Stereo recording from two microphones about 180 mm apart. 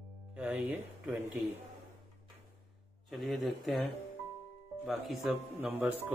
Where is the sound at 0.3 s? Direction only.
5° right (ahead or behind).